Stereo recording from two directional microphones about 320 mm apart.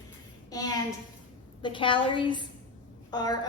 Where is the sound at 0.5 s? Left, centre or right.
Centre.